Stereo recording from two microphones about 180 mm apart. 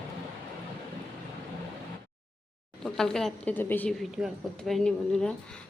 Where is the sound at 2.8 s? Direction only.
5° left (ahead or behind).